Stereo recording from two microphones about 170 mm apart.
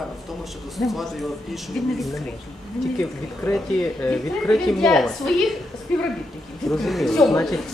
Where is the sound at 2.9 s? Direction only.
10° left (ahead or behind).